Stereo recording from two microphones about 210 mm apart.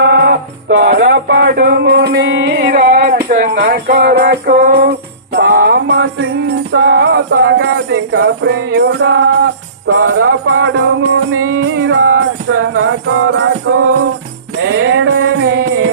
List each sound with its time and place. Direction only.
0.0 s music: 50° right (ahead or behind)
9.8 s music: 85° right
14.6 s music: 60° right (ahead or behind)